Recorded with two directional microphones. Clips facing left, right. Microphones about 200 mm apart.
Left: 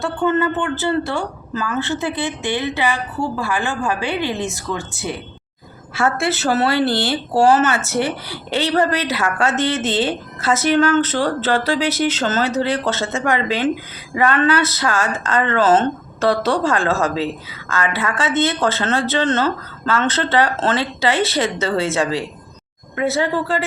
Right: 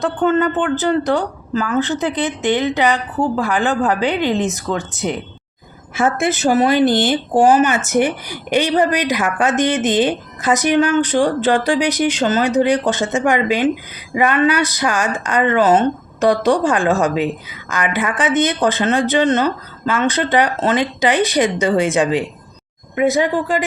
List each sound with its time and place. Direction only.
0.0 s a woman's voice: 20° right (ahead or behind)